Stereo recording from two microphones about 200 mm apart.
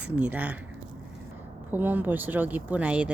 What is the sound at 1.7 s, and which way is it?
Speech, 10° right (ahead or behind).